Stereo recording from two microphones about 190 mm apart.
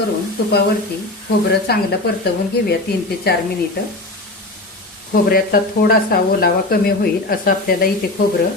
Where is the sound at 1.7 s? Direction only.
55° left (ahead or behind).